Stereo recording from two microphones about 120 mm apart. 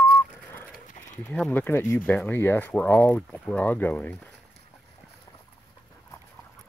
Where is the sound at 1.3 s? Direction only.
10° left (ahead or behind).